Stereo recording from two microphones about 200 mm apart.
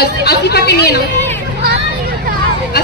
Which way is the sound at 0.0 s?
55° left (ahead or behind).